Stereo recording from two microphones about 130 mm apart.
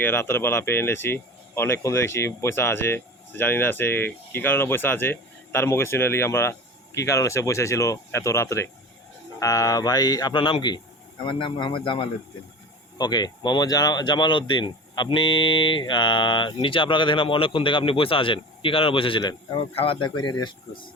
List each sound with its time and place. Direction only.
0.0 s speech: 15° left (ahead or behind); by 19.5 s 35° left (ahead or behind)
19.5 s speech: 45° left (ahead or behind)